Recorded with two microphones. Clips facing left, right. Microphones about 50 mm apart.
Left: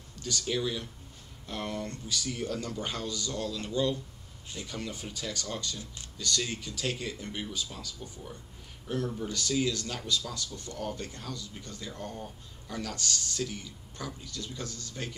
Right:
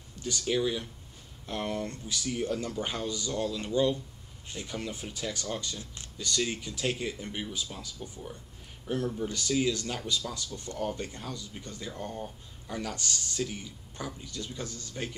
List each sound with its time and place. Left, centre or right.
0.2 s speech: centre